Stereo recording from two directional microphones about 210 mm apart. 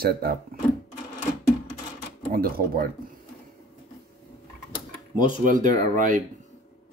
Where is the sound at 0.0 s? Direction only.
45° right (ahead or behind).